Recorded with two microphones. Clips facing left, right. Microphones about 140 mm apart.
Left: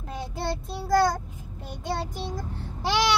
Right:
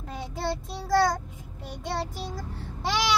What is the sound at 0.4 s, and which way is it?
Child singing, centre (ahead or behind).